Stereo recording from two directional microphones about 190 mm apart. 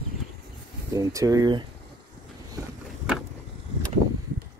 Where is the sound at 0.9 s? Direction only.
15° right (ahead or behind).